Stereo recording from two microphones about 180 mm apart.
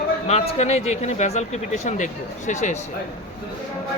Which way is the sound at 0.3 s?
35° left (ahead or behind).